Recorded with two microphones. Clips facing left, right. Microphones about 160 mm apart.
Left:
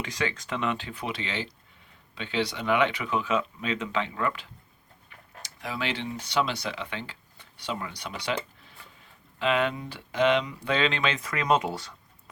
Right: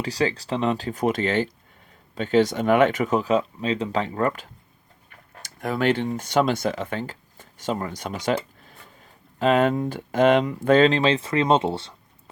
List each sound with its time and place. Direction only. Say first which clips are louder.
0.0 s speech: right 7 dB; 35° right (ahead or behind)